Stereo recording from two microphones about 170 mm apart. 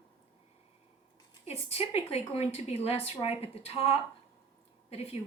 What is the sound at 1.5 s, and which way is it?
A woman's voice, 35° left (ahead or behind).